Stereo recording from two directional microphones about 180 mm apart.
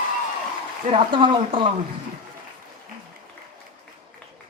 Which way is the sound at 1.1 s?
30° right (ahead or behind).